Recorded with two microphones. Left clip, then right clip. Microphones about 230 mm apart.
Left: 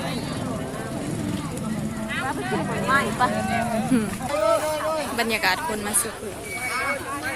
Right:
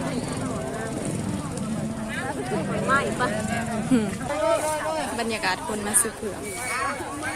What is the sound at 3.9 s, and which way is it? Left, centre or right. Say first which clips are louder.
Speech: right 3 dB; centre.